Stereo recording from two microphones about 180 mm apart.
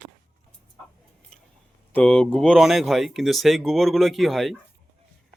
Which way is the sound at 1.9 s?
5° left (ahead or behind).